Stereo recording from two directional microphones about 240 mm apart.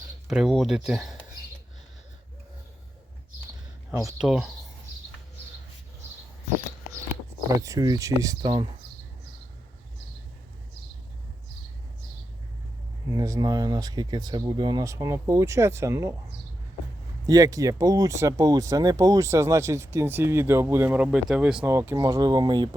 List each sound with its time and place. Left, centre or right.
0.3 s speech: centre
3.9 s speech: centre
7.6 s speech: centre
13.1 s speech: centre
17.2 s speech: centre